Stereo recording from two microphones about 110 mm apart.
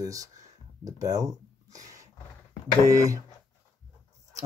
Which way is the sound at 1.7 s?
30° right (ahead or behind).